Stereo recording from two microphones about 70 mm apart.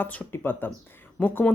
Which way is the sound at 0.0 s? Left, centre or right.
Left.